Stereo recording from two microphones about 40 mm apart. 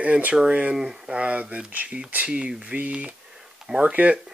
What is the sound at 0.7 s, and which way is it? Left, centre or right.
Speech, centre.